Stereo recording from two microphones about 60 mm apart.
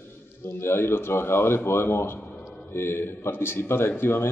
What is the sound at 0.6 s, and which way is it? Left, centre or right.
Speech, left.